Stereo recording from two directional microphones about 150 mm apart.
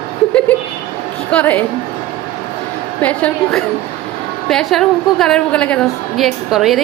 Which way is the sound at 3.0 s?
10° left (ahead or behind).